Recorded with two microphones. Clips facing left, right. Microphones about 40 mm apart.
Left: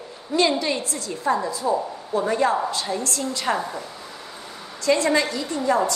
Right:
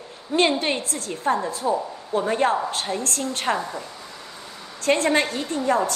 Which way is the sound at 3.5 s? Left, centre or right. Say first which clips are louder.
Left 1 dB; centre.